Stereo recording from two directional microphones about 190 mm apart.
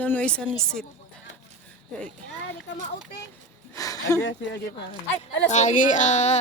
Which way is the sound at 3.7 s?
15° left (ahead or behind).